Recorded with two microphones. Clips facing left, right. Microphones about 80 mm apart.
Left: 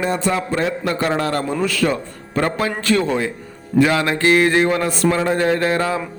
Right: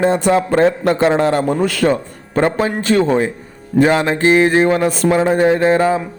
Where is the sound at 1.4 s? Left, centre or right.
Right.